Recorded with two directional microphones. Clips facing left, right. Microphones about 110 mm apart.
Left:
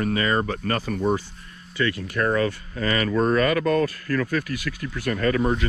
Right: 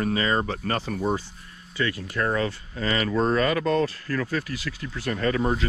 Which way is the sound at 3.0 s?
30° right (ahead or behind).